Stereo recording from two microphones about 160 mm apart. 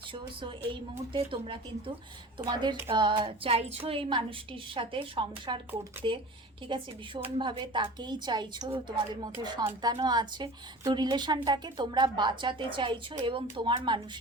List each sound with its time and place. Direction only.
0.1 s a woman's voice: 30° right (ahead or behind)